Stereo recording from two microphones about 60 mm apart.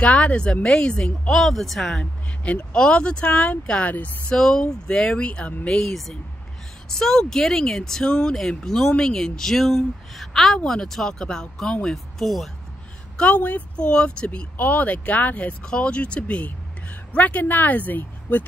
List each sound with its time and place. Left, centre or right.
0.0 s speech: left; by 2.0 s centre
2.4 s speech: centre
4.3 s speech: centre
5.8 s speech: centre
13.2 s speech: left